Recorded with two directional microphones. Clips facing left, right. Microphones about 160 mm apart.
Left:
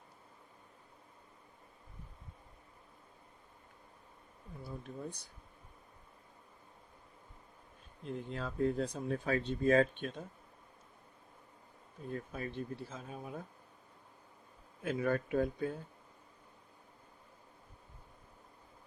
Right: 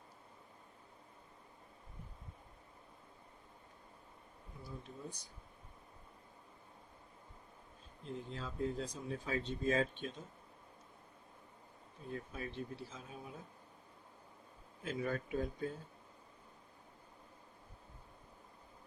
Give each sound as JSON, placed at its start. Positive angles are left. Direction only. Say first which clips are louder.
{"t": 4.6, "sound": "speech", "louder": "left 5 dB", "side_deg": 60}
{"t": 8.0, "sound": "speech", "louder": "left 4 dB", "side_deg": 60}
{"t": 12.1, "sound": "speech", "louder": "left 3 dB", "side_deg": 50}
{"t": 14.8, "sound": "speech", "louder": "left 5 dB", "side_deg": 60}